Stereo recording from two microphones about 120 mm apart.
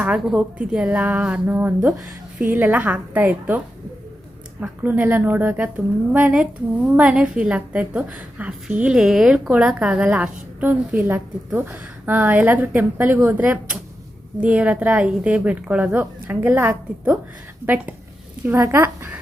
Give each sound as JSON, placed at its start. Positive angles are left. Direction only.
{"t": 0.0, "sound": "a woman's voice", "side_deg": -10}
{"t": 4.6, "sound": "a woman's voice", "side_deg": -10}
{"t": 18.4, "sound": "speech", "side_deg": -20}